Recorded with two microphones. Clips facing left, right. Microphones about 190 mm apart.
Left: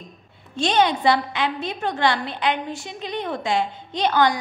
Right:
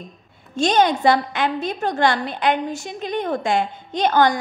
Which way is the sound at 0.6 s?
45° right (ahead or behind).